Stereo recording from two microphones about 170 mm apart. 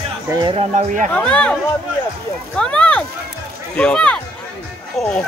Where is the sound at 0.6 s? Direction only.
45° right (ahead or behind).